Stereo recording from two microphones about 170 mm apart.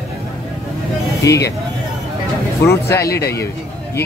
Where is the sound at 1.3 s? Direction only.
20° left (ahead or behind).